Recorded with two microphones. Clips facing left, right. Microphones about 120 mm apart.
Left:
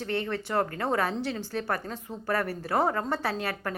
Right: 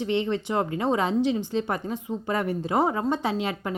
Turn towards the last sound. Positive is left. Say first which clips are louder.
# right 3 dB
turn(degrees=-15)  # may be behind; listen again after turning